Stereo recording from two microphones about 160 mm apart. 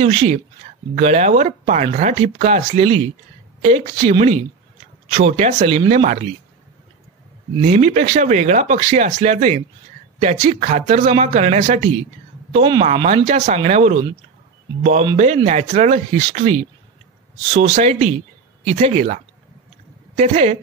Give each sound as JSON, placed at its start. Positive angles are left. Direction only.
{"t": 0.0, "sound": "speech", "side_deg": -40}
{"t": 7.6, "sound": "speech", "side_deg": -50}
{"t": 20.2, "sound": "speech", "side_deg": -45}